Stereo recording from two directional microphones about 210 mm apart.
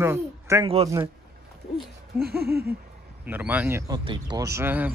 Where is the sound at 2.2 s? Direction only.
50° right (ahead or behind).